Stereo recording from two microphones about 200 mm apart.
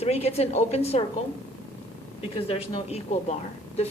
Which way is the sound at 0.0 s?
30° left (ahead or behind).